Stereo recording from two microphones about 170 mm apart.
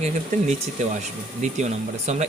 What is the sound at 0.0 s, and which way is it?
Speech, 45° right (ahead or behind).